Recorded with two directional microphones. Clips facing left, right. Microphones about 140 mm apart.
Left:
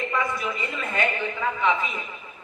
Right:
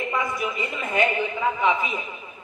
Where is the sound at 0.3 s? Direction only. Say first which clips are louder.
Right 1 dB; 15° right (ahead or behind).